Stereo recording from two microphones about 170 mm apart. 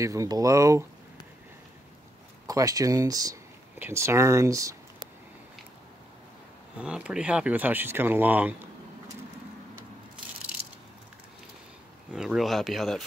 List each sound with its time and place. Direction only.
0.0 s speech: 20° right (ahead or behind)
2.4 s speech: 20° right (ahead or behind)
6.8 s speech: 5° right (ahead or behind)
12.1 s speech: 5° right (ahead or behind)